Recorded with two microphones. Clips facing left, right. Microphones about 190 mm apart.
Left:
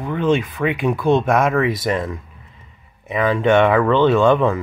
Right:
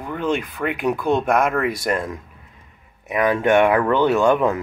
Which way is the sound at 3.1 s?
15° right (ahead or behind).